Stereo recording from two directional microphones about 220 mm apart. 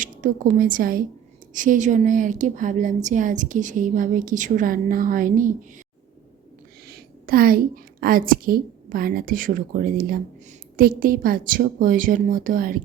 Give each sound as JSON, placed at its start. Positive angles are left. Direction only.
{"t": 0.0, "sound": "a woman's voice", "side_deg": -35}
{"t": 6.8, "sound": "a sound", "side_deg": -45}
{"t": 8.0, "sound": "a woman's voice", "side_deg": -40}